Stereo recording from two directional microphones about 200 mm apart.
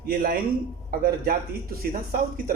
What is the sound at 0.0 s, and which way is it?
Speech, 50° right (ahead or behind).